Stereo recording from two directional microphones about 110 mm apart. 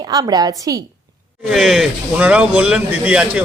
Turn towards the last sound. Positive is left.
turn(degrees=-10)  # may be behind; listen again after turning